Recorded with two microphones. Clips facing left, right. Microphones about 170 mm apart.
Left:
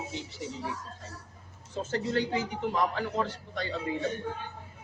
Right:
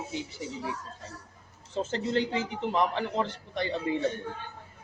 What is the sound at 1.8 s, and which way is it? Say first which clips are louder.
A man's voice: right 1 dB; 20° right (ahead or behind).